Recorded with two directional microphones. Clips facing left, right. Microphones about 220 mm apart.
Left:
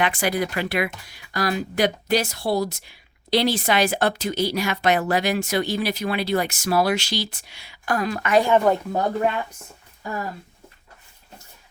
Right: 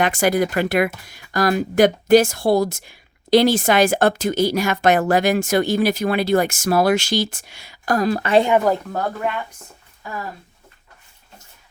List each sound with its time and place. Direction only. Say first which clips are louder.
0.0 s speech: right 5 dB; 45° right (ahead or behind)
8.9 s speech: left 2 dB; 15° left (ahead or behind)